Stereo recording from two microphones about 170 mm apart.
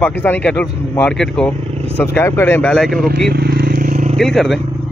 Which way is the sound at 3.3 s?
60° right (ahead or behind).